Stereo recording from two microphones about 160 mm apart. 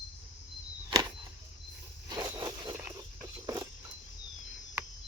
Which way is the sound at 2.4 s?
25° right (ahead or behind).